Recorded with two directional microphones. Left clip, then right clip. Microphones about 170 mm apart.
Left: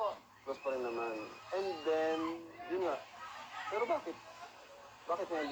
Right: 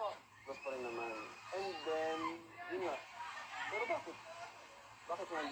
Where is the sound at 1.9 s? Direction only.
35° left (ahead or behind).